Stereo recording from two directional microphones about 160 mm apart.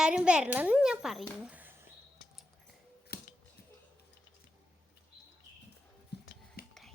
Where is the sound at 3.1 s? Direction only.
80° left.